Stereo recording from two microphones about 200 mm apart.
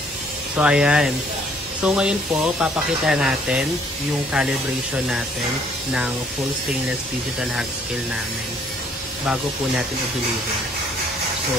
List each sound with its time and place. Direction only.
0.6 s speech: 5° right (ahead or behind)